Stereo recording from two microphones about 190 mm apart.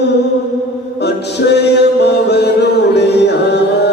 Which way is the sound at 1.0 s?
60° left (ahead or behind).